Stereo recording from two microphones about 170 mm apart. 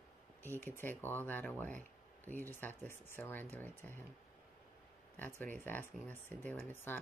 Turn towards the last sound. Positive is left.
turn(degrees=10)  # may be behind; listen again after turning